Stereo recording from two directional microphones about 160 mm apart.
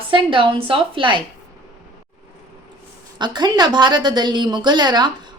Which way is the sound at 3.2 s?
25° right (ahead or behind).